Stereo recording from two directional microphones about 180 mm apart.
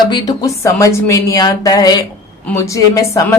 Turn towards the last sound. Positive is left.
turn(degrees=15)  # may be behind; listen again after turning